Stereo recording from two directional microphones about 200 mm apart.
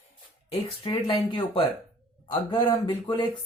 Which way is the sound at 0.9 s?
25° left (ahead or behind).